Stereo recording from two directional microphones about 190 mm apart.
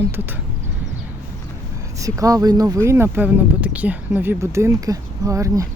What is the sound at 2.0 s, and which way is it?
Speech, 15° right (ahead or behind).